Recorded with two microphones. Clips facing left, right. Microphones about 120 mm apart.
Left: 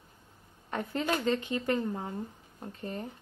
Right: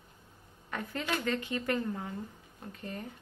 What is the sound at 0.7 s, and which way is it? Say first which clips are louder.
Speech: left 4 dB; 30° left (ahead or behind).